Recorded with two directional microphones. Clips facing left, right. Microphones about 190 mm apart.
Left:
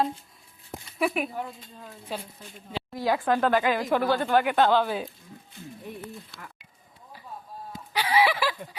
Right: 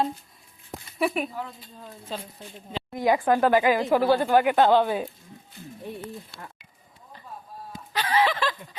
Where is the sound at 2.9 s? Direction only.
15° right (ahead or behind).